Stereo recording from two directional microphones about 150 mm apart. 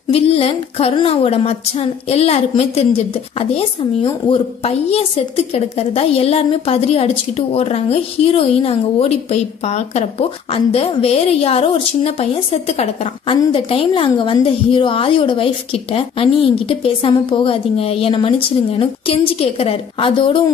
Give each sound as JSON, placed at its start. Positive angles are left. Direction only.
{"t": 0.1, "sound": "a woman's voice", "side_deg": 40}